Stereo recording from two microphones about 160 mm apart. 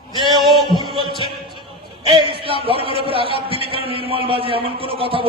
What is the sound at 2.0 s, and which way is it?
A man's voice, 30° right (ahead or behind).